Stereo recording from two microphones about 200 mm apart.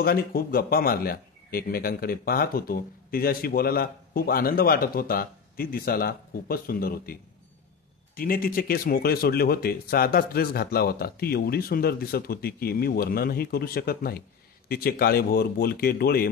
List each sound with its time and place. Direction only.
0.0 s a man's voice: 50° left (ahead or behind)
8.2 s a man's voice: 45° left (ahead or behind)